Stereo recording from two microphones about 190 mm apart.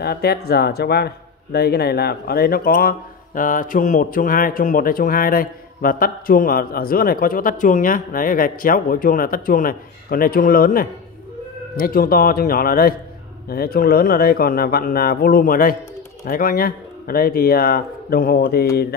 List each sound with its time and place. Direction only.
0.0 s speech: 55° left (ahead or behind)